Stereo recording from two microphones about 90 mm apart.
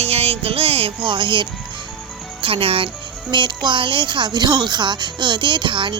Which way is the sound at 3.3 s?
55° right (ahead or behind).